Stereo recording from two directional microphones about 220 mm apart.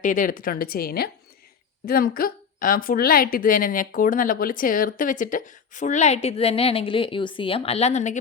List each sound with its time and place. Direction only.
0.0 s a woman's voice: 35° left (ahead or behind)